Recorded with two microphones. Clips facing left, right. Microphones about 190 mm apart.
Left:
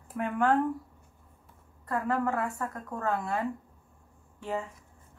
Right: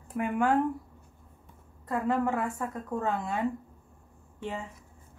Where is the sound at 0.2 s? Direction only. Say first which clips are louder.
Even; 10° right (ahead or behind).